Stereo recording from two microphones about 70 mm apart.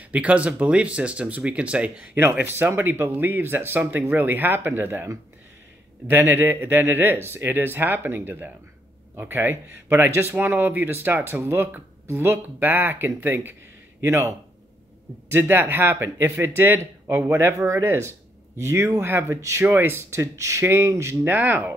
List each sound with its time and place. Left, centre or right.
0.1 s speech: centre
2.1 s speech: right
6.0 s a man's voice: right
15.3 s a man's voice: right
19.6 s a man's voice: right
21.3 s speech: right